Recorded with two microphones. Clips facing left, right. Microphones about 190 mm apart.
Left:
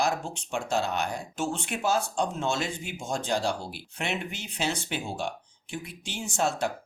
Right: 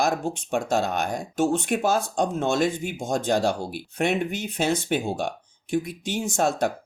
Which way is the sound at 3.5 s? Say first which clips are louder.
Right 5 dB; 55° right (ahead or behind).